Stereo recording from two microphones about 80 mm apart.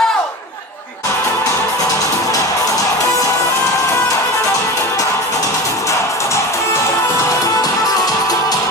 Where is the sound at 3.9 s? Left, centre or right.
Left.